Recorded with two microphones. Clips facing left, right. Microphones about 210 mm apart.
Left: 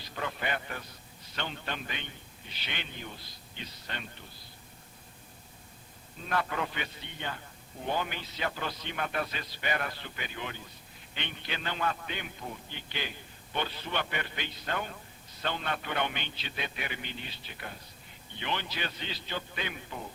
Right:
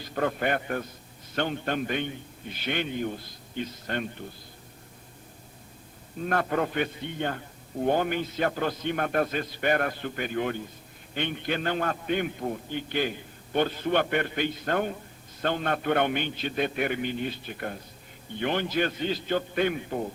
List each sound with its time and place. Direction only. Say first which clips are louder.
0.1 s a man's voice: right 8 dB; 50° right (ahead or behind)
6.2 s a man's voice: right 6 dB; 50° right (ahead or behind)